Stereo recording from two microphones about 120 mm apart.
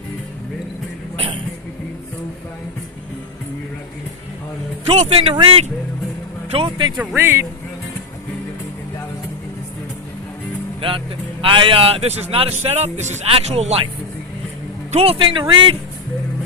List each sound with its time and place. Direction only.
1.1 s a sound: 45° right (ahead or behind)
4.9 s speech: 55° right (ahead or behind)
6.9 s speech: centre (ahead or behind)
7.2 s speech: 20° right (ahead or behind)
10.8 s a man's voice: 45° right (ahead or behind)
14.9 s speech: 50° right (ahead or behind)